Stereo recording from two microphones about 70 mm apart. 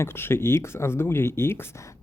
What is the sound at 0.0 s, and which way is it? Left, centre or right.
Speech, left.